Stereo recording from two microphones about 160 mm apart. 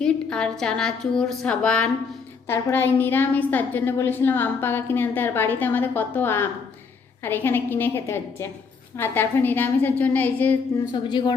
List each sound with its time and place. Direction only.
0.0 s a woman's voice: 5° left (ahead or behind)
10.9 s a woman's voice: 30° left (ahead or behind)